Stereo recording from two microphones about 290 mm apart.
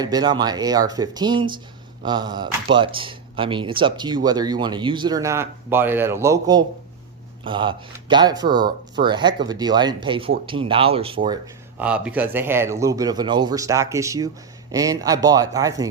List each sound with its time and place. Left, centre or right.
0.0 s speech: centre
11.8 s speech: centre